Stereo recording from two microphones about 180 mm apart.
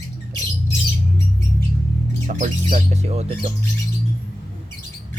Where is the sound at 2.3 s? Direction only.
45° right (ahead or behind).